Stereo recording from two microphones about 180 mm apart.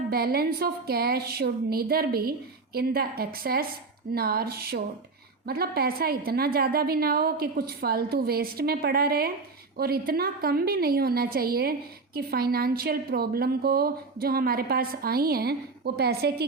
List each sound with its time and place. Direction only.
0.1 s a woman's voice: 60° right (ahead or behind)